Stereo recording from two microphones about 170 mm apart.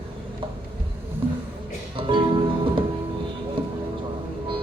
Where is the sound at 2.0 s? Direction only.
30° right (ahead or behind).